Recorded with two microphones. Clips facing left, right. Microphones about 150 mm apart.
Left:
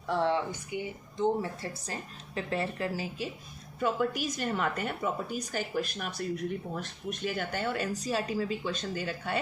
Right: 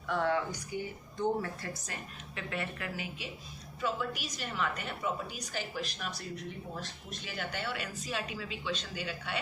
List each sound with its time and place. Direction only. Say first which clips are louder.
0.1 s speech: left 3 dB; 25° left (ahead or behind)
3.8 s a woman's voice: left 6 dB; 50° left (ahead or behind)